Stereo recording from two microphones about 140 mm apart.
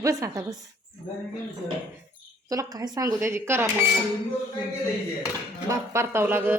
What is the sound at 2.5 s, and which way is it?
A woman's voice, 25° right (ahead or behind).